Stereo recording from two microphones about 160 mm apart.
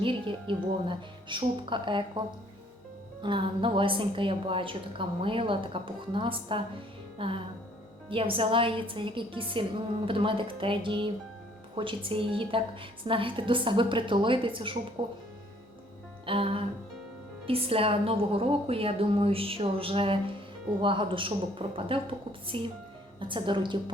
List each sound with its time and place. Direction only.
0.0 s a woman's voice: 30° right (ahead or behind)
3.2 s a woman's voice: 30° right (ahead or behind)
16.2 s music: 35° right (ahead or behind)
17.4 s a woman's voice: 35° right (ahead or behind)